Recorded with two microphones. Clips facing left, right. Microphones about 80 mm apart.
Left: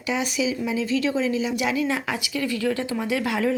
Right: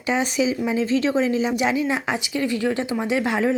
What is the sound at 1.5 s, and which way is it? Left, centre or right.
A woman's voice, right.